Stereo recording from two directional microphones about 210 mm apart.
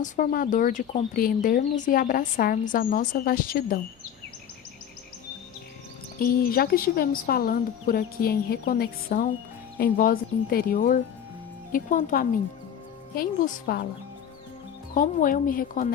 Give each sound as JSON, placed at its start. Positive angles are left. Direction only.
{"t": 0.0, "sound": "speech", "side_deg": 40}
{"t": 6.1, "sound": "speech", "side_deg": 45}
{"t": 14.9, "sound": "speech", "side_deg": 40}